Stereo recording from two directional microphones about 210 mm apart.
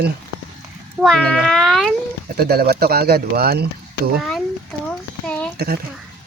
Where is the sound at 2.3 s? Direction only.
45° right (ahead or behind).